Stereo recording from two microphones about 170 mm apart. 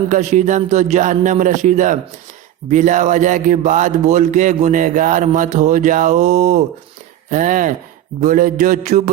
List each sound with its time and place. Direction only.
0.1 s a man's voice: 45° right (ahead or behind)